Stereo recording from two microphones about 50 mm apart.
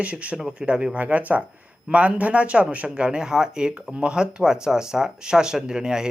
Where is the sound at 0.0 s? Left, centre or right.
Right.